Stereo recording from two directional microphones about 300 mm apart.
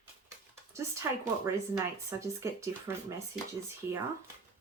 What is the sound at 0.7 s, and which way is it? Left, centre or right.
Speech, centre.